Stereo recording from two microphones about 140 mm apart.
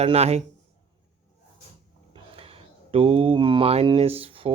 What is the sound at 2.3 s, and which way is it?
Speech, 40° right (ahead or behind).